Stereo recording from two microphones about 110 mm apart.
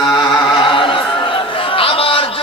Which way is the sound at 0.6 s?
50° left (ahead or behind).